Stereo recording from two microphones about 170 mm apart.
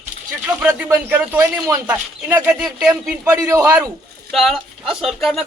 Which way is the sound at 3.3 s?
20° right (ahead or behind).